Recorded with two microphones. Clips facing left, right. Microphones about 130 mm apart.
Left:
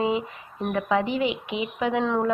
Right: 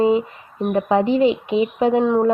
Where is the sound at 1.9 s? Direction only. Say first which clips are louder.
Right 6 dB; 15° right (ahead or behind).